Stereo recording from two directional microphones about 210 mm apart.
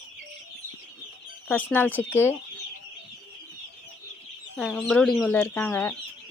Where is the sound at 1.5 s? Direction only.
10° left (ahead or behind).